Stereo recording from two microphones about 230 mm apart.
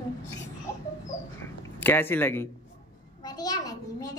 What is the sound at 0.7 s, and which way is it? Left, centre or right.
A child's voice, centre.